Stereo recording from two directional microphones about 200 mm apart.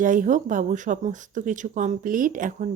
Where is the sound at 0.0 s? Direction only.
40° right (ahead or behind).